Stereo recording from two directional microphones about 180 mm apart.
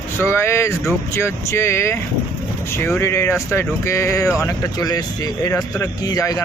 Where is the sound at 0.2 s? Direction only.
15° left (ahead or behind).